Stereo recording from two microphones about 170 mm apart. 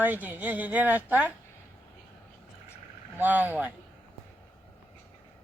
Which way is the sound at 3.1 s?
10° right (ahead or behind).